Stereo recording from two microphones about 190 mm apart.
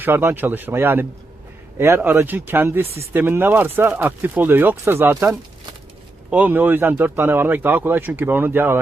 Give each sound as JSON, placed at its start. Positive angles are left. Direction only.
{"t": 0.0, "sound": "speech", "side_deg": -10}
{"t": 2.8, "sound": "speech", "side_deg": -30}
{"t": 3.1, "sound": "speech", "side_deg": -10}